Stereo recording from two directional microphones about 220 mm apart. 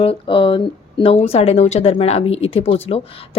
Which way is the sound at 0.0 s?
25° left (ahead or behind).